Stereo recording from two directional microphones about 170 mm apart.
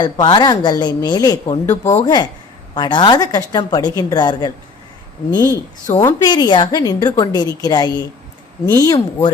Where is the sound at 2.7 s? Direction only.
25° left (ahead or behind).